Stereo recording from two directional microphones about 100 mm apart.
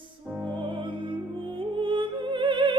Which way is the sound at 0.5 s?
55° right (ahead or behind).